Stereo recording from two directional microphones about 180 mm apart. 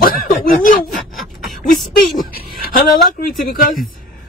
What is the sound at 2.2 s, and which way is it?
Speech, 50° left (ahead or behind).